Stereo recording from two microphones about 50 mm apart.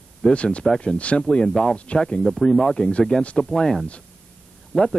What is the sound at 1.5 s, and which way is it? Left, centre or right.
Speech, centre.